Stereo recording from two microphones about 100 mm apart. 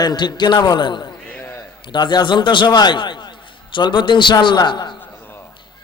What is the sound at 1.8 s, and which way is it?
A man's voice, 50° left (ahead or behind).